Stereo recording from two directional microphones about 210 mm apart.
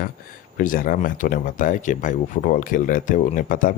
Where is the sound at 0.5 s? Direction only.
40° left (ahead or behind).